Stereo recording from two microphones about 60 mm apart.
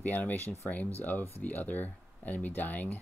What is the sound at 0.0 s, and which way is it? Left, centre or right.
Speech, left.